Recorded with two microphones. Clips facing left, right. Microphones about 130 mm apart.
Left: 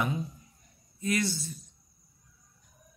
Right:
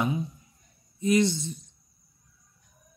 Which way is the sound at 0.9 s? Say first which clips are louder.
Right 7 dB; 20° right (ahead or behind).